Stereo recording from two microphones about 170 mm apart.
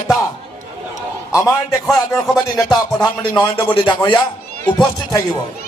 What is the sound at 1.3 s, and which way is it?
Speech, 15° left (ahead or behind).